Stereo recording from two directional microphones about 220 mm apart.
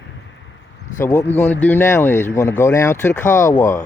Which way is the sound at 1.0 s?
10° left (ahead or behind).